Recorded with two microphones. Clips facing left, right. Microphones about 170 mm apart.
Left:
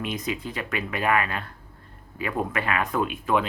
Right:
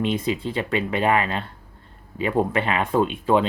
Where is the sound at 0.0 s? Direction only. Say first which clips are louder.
Right 6 dB; 25° right (ahead or behind).